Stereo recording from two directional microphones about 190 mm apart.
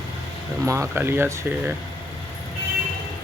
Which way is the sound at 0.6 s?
15° right (ahead or behind).